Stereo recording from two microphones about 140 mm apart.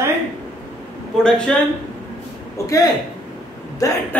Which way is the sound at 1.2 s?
5° left (ahead or behind).